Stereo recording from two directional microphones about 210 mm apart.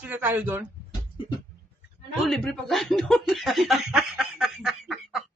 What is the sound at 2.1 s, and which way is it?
Speech, centre (ahead or behind).